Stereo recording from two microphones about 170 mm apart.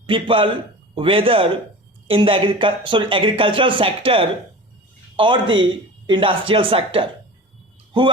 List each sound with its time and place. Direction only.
0.0 s a man's voice: 30° right (ahead or behind)